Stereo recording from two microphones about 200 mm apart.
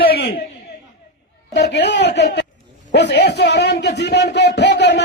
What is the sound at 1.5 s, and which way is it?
Speech, 55° left (ahead or behind).